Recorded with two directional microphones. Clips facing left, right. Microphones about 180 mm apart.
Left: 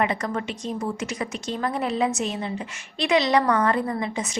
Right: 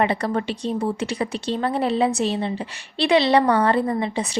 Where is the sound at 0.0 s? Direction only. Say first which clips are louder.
Right 4 dB; 35° right (ahead or behind).